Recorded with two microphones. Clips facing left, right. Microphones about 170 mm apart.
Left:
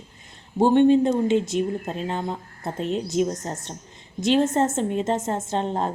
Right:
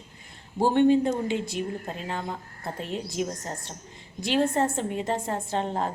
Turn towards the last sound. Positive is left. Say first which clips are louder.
# left 3 dB
turn(degrees=25)  # may be behind; listen again after turning